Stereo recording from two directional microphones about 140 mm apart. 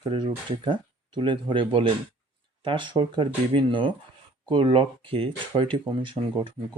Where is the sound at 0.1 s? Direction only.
40° right (ahead or behind).